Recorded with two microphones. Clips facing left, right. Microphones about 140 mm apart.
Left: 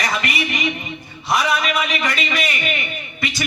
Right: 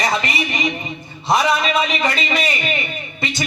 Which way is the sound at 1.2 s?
30° right (ahead or behind).